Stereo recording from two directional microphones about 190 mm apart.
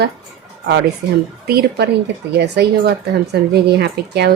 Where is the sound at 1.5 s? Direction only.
55° right (ahead or behind).